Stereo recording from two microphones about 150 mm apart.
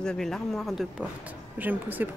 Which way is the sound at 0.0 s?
5° left (ahead or behind).